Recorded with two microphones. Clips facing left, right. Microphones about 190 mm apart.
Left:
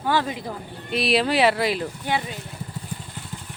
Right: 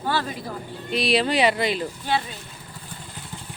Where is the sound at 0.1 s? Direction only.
15° left (ahead or behind).